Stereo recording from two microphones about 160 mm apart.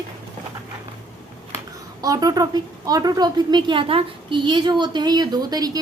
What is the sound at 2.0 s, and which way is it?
A woman's voice, 20° right (ahead or behind).